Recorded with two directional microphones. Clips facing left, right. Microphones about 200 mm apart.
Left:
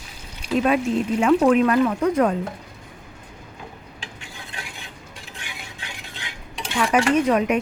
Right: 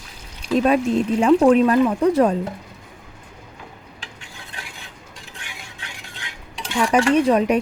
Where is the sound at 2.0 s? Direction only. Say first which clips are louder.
Right 3 dB; 30° right (ahead or behind).